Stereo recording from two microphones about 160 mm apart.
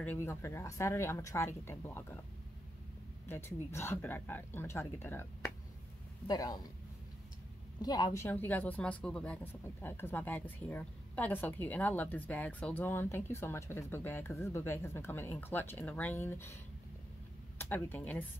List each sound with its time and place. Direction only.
0.0 s a woman's voice: 15° left (ahead or behind)
3.3 s a woman's voice: 15° left (ahead or behind)
7.8 s a woman's voice: 25° left (ahead or behind)
17.6 s a woman's voice: 15° left (ahead or behind)